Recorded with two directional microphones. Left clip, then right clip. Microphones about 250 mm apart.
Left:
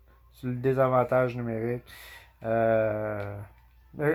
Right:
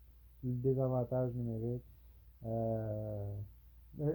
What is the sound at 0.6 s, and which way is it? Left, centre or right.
Speech, left.